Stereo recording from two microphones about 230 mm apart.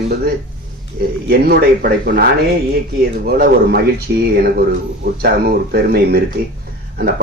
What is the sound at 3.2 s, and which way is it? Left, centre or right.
Speech, right.